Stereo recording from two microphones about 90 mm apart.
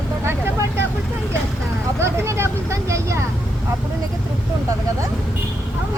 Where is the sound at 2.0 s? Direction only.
30° right (ahead or behind).